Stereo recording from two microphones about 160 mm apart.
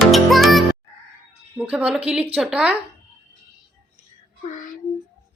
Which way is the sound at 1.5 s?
5° right (ahead or behind).